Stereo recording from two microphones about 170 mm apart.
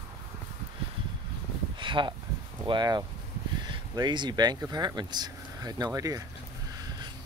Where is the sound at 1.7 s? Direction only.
30° right (ahead or behind).